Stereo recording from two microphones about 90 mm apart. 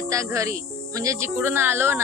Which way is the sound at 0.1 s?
35° right (ahead or behind).